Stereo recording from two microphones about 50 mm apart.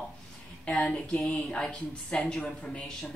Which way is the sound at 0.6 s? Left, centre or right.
Left.